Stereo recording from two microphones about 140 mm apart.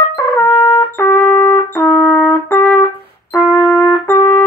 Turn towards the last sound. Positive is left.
turn(degrees=20)  # may be behind; listen again after turning